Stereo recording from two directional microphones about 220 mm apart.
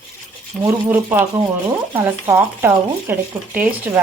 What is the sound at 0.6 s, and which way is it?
Speech, 10° right (ahead or behind).